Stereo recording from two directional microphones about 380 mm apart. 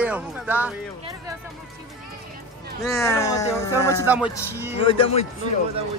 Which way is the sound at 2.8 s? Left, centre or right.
Centre.